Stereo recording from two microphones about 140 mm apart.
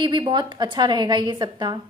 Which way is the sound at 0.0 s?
35° right (ahead or behind).